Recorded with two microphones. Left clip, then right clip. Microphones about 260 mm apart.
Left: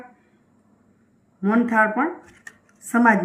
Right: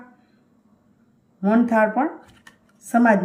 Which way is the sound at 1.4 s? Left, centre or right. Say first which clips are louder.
Right 1 dB; centre.